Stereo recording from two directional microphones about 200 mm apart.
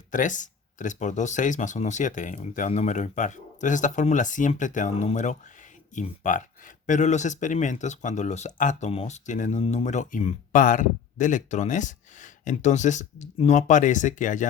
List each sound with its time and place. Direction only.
0.1 s speech: 40° left (ahead or behind)